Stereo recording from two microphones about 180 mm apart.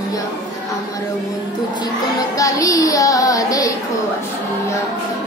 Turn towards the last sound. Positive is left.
turn(degrees=20)  # may be behind; listen again after turning